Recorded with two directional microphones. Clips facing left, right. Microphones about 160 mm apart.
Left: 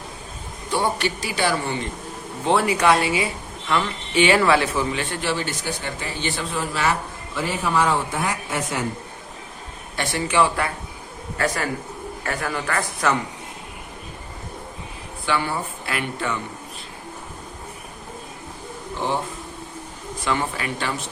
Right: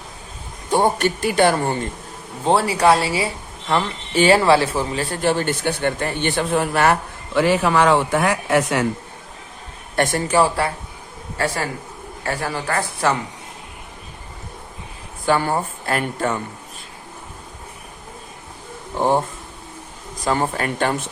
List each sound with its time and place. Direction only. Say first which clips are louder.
0.7 s a man's voice: right 5 dB; 45° right (ahead or behind)
2.4 s a man's voice: right 2 dB; 35° right (ahead or behind); by 8.8 s 70° right (ahead or behind)
9.9 s speech: right 5 dB; 50° right (ahead or behind); by 13.1 s 30° right (ahead or behind)
15.3 s a man's voice: right 5 dB; 45° right (ahead or behind)
18.9 s a man's voice: right 7 dB; 50° right (ahead or behind)